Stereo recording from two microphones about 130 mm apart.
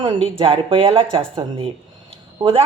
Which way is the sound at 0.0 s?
40° right (ahead or behind).